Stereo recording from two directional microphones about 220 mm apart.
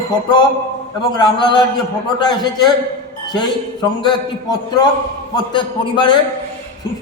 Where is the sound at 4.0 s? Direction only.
20° left (ahead or behind).